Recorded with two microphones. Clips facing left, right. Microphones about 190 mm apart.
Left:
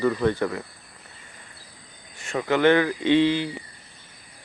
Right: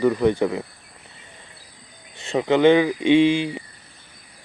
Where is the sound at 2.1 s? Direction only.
25° right (ahead or behind).